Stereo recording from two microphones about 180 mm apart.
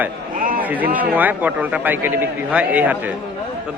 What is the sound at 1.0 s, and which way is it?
A man's voice, 10° right (ahead or behind).